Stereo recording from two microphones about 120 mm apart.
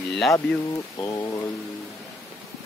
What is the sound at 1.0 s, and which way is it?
Speech, 25° left (ahead or behind).